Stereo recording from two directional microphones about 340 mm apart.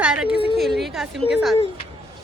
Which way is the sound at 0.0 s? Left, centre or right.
Centre.